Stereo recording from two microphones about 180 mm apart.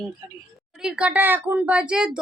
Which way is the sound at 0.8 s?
5° right (ahead or behind).